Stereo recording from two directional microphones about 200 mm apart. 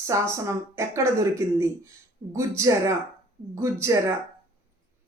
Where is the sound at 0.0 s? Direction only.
15° right (ahead or behind).